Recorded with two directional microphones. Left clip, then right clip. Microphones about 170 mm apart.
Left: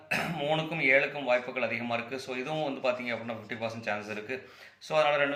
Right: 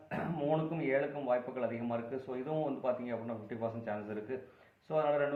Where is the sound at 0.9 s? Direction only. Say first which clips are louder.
Left 8 dB; 15° left (ahead or behind).